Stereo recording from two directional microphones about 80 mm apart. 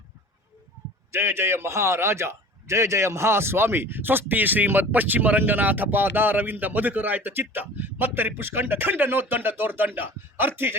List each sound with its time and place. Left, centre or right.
1.1 s a man's voice: right